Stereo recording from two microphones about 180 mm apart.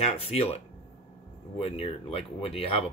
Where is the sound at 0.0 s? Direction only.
35° left (ahead or behind).